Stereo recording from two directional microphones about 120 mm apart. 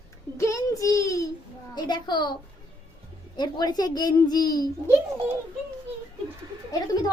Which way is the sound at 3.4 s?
35° left (ahead or behind).